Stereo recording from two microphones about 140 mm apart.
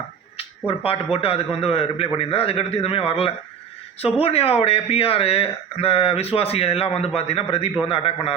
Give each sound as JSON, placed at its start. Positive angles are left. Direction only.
{"t": 0.7, "sound": "speech", "side_deg": 40}